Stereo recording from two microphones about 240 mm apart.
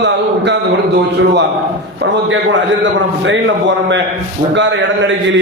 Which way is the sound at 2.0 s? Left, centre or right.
Right.